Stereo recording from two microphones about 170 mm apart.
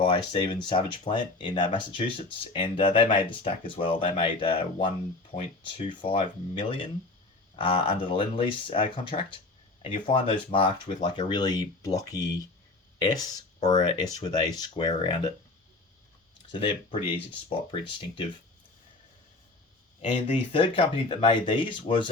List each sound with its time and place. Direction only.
0.0 s speech: 30° left (ahead or behind)
16.5 s speech: 30° left (ahead or behind)
20.5 s speech: 30° left (ahead or behind)